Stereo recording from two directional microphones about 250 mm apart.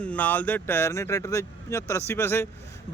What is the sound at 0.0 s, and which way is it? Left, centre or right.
Speech, centre.